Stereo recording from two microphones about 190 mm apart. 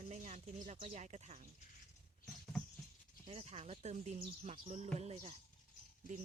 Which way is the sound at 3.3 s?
35° right (ahead or behind).